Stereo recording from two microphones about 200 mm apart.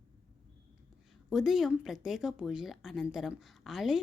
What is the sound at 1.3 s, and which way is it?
Speech, centre (ahead or behind).